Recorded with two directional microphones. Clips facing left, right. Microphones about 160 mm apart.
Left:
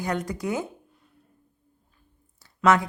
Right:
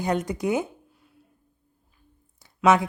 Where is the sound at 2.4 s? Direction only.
20° right (ahead or behind).